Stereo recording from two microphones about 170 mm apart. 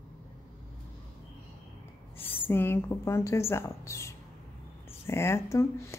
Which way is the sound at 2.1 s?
35° left (ahead or behind).